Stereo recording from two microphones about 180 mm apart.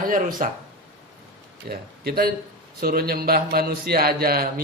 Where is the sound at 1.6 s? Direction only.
60° right (ahead or behind).